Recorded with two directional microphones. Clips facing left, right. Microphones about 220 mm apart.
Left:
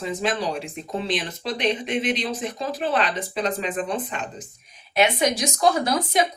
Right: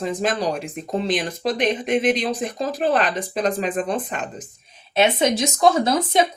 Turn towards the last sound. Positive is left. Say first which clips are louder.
# right 3 dB
turn(degrees=-25)  # may be behind; listen again after turning